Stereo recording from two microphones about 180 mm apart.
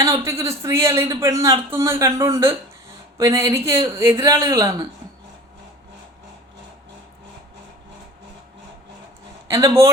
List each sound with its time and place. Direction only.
0.0 s speech: 15° right (ahead or behind)
9.5 s speech: 15° right (ahead or behind)